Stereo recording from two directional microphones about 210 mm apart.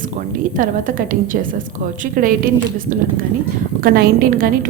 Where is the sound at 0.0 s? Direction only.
40° right (ahead or behind).